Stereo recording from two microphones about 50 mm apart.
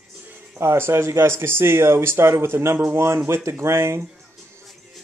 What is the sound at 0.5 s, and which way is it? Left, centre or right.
Speech, right.